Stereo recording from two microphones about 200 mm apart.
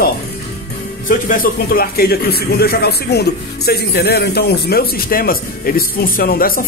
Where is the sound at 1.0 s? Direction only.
45° left (ahead or behind).